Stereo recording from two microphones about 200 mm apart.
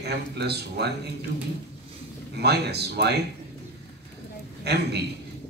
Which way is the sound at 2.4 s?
55° right (ahead or behind).